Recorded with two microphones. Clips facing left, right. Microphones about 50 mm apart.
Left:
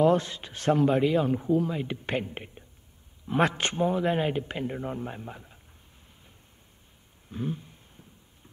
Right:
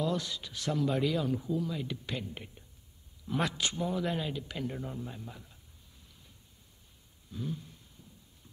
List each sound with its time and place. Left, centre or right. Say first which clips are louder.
0.0 s speech: left 10 dB; left
4.9 s speech: left 6 dB; left
7.2 s a sound: left 5 dB; left